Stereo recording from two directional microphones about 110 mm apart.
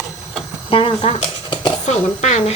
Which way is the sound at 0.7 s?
55° left (ahead or behind).